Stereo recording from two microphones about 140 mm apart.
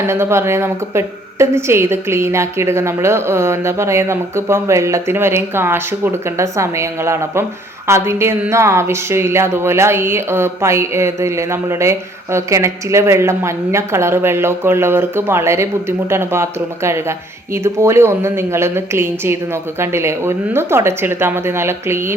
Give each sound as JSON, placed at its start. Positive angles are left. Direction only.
{"t": 0.1, "sound": "speech", "side_deg": -20}